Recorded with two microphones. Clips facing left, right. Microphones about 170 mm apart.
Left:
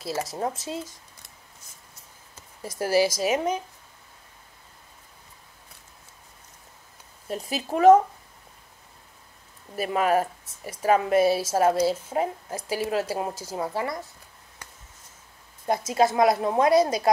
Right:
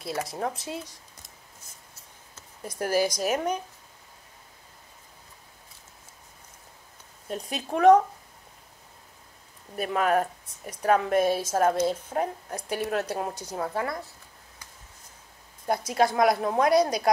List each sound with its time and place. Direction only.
0.3 s speech: 5° left (ahead or behind)
2.3 s speech: 5° left (ahead or behind)
7.2 s speech: 5° left (ahead or behind)
9.8 s a woman's voice: 5° left (ahead or behind)
14.6 s a sound: 65° left (ahead or behind)
15.6 s speech: centre (ahead or behind)